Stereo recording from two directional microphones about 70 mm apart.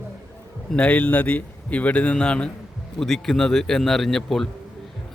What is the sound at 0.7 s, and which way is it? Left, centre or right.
A man's voice, centre.